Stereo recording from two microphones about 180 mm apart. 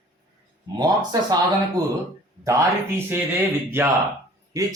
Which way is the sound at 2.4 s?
15° right (ahead or behind).